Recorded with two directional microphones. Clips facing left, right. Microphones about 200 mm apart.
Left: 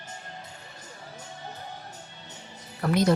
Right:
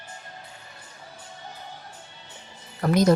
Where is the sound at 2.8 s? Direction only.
40° right (ahead or behind).